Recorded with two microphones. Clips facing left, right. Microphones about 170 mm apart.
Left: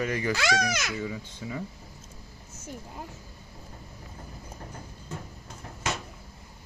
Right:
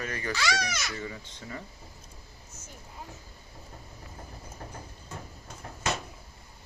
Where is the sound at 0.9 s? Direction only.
5° left (ahead or behind).